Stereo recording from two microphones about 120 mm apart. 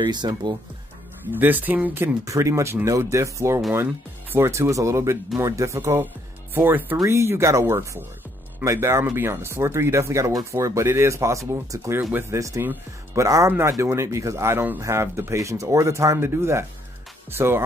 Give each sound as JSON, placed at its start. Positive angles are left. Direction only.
{"t": 0.0, "sound": "speech", "side_deg": -35}
{"t": 1.3, "sound": "speech", "side_deg": -15}
{"t": 2.2, "sound": "speech", "side_deg": -25}